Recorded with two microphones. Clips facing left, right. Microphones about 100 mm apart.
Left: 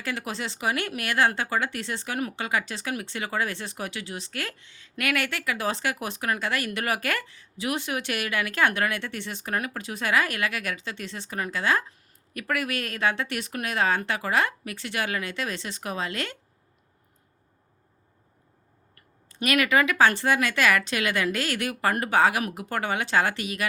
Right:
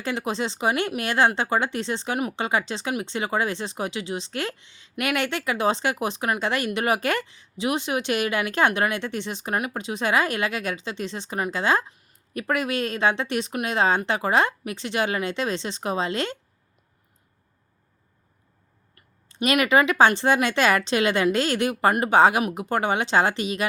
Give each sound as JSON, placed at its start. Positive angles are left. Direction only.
{"t": 0.0, "sound": "speech", "side_deg": -25}
{"t": 19.3, "sound": "speech", "side_deg": -20}